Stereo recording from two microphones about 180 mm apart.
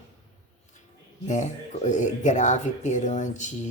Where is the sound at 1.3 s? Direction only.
40° left (ahead or behind).